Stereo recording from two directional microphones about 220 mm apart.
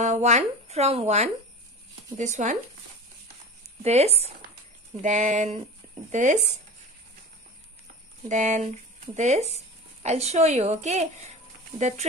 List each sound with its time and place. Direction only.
0.0 s speech: 30° right (ahead or behind)
3.8 s speech: 30° right (ahead or behind)
8.3 s speech: 30° right (ahead or behind)